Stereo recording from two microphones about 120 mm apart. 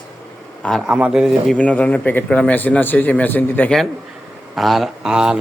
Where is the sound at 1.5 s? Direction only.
10° left (ahead or behind).